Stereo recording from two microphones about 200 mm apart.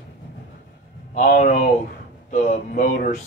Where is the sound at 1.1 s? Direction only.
40° left (ahead or behind).